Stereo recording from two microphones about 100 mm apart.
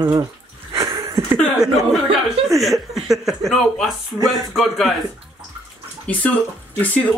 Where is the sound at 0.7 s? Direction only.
30° right (ahead or behind).